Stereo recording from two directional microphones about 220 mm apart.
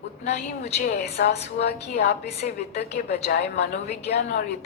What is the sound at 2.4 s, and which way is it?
A woman's voice, 35° left (ahead or behind).